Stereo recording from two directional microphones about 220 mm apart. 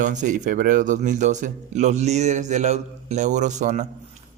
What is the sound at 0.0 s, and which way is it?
A man's voice, 35° right (ahead or behind).